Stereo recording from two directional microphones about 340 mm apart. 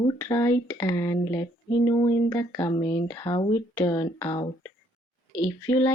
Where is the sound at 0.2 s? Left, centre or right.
Centre.